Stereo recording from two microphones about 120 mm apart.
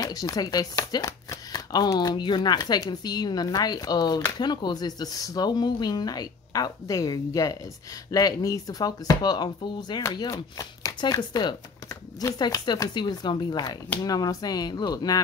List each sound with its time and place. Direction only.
0.0 s speech: 30° left (ahead or behind)
12.4 s speech: 35° left (ahead or behind)